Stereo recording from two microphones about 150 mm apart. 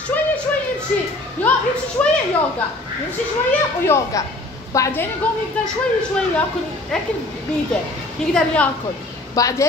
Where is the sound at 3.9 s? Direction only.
20° left (ahead or behind).